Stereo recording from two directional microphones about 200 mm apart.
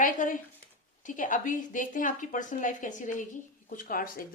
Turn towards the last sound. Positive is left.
turn(degrees=45)  # may be behind; listen again after turning